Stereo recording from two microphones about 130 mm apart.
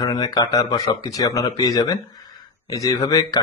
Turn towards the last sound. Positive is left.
turn(degrees=30)  # may be behind; listen again after turning